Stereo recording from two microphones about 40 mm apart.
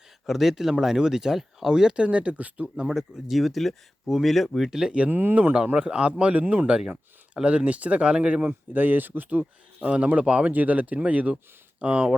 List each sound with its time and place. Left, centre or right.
0.3 s speech: centre
2.0 s speech: right
2.7 s speech: centre
4.7 s speech: centre
5.1 s speech: right
5.7 s a man's voice: right
6.4 s speech: right
6.7 s speech: right
8.7 s speech: right
9.9 s speech: right
10.5 s speech: right
11.8 s a man's voice: right